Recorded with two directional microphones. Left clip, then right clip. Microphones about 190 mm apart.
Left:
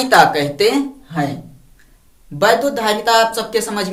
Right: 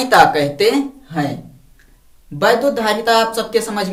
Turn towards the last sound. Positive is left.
turn(degrees=10)  # may be behind; listen again after turning